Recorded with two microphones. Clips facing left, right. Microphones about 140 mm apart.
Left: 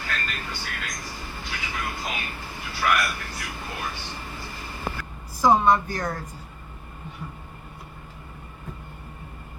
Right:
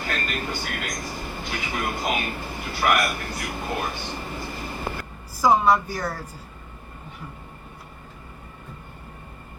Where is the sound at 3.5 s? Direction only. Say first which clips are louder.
Right 6 dB; 50° right (ahead or behind).